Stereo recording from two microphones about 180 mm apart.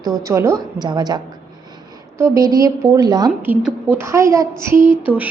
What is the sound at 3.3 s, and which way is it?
A woman's voice, 10° right (ahead or behind).